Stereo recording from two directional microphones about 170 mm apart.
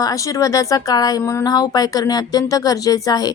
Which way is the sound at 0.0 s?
20° left (ahead or behind).